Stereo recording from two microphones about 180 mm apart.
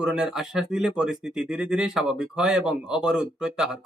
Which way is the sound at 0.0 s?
5° right (ahead or behind).